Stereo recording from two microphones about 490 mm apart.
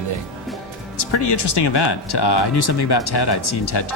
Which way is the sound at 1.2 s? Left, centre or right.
Left.